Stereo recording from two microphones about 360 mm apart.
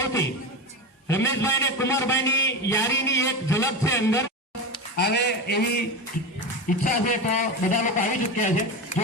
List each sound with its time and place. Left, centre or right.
0.0 s a sound: centre
1.0 s a man's voice: centre
4.9 s a man's voice: left
6.8 s a man's voice: left